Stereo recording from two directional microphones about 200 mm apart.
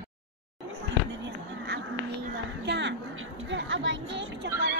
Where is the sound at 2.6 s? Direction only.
60° right (ahead or behind).